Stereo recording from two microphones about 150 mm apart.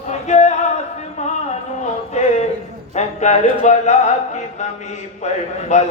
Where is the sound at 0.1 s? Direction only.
50° left (ahead or behind).